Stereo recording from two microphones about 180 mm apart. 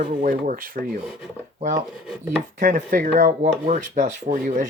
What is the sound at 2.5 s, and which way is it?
Speech, 45° right (ahead or behind).